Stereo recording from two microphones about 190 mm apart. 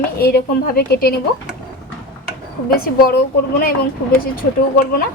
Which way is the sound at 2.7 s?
50° left (ahead or behind).